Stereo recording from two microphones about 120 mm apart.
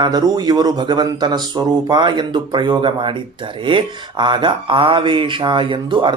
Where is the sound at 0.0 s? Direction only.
35° right (ahead or behind).